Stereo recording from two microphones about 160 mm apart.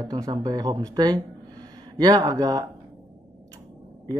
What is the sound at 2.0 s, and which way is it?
Speech, 25° right (ahead or behind).